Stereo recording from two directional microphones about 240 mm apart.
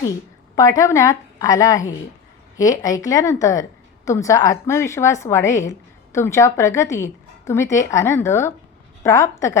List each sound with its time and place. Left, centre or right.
0.5 s a woman's voice: centre